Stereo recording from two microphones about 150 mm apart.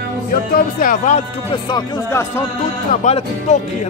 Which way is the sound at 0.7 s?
60° left (ahead or behind).